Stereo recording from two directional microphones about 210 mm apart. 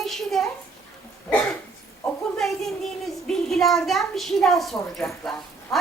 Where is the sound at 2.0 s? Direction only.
Centre (ahead or behind).